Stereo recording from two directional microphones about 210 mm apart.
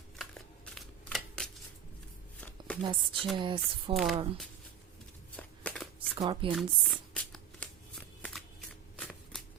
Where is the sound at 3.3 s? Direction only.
20° right (ahead or behind).